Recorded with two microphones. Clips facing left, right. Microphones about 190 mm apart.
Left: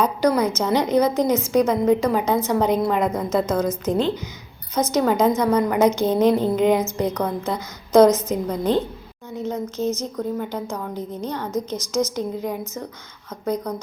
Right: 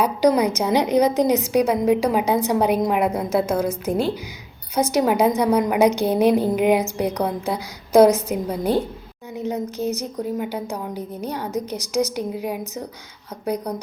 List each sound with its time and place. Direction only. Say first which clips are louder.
0.0 s a woman's voice: right 2 dB; 15° right (ahead or behind)